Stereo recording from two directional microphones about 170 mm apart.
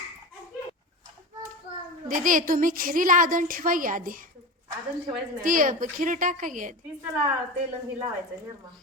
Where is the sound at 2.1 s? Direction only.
50° right (ahead or behind).